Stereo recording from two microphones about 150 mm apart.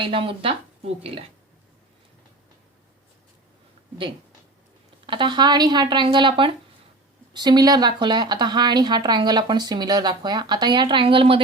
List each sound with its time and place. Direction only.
0.0 s speech: 35° right (ahead or behind)
5.0 s a woman's voice: 35° right (ahead or behind)